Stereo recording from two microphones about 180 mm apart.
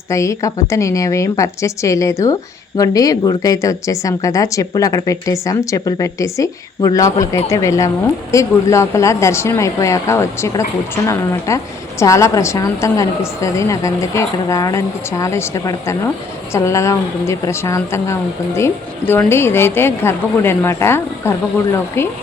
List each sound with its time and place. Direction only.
0.1 s a woman's voice: 15° left (ahead or behind)